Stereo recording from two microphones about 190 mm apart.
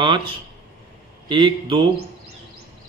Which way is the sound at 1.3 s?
25° right (ahead or behind).